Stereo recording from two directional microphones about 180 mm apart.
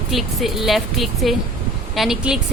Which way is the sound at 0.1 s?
Centre (ahead or behind).